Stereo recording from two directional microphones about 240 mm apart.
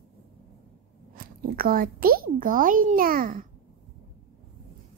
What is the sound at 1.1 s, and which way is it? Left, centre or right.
Speech, right.